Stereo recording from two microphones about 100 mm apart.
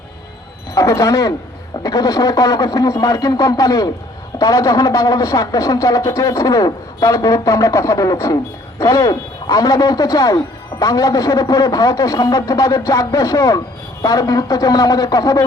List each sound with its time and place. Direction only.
0.7 s a man's voice: 35° left (ahead or behind)